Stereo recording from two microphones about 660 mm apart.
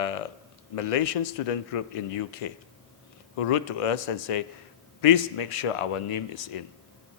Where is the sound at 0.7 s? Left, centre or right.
Left.